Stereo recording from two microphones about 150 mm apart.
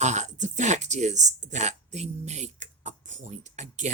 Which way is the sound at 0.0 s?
50° right (ahead or behind).